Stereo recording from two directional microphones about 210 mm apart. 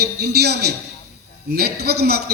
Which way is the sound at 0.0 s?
50° right (ahead or behind).